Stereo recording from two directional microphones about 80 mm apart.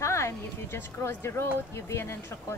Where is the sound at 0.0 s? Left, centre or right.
Left.